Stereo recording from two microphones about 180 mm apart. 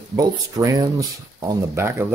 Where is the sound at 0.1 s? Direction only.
15° right (ahead or behind).